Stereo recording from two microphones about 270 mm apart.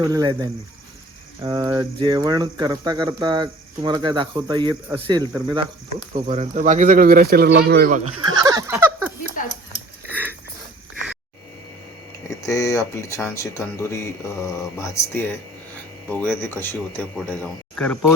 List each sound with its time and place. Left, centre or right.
0.0 s speech: centre
8.2 s a sound: centre
12.4 s speech: centre